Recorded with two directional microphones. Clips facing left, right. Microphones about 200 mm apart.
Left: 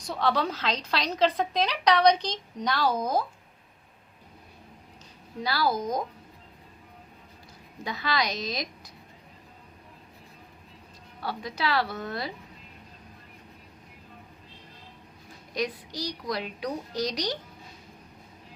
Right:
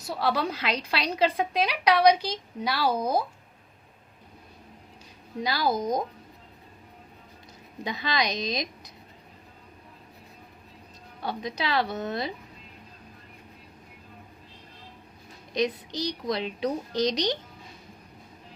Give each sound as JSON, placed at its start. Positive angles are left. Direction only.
{"t": 0.0, "sound": "a woman's voice", "side_deg": -5}
{"t": 5.4, "sound": "a child's voice", "side_deg": -20}
{"t": 7.9, "sound": "a child's voice", "side_deg": -20}
{"t": 11.2, "sound": "a child's voice", "side_deg": -20}
{"t": 15.5, "sound": "a child's voice", "side_deg": -20}